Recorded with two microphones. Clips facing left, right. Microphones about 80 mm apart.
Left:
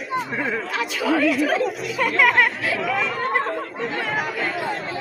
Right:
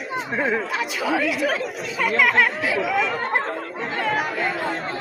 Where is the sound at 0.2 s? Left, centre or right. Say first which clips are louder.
Right 5 dB; centre.